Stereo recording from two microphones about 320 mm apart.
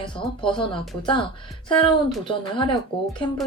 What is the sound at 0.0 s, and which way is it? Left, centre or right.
Speech, centre.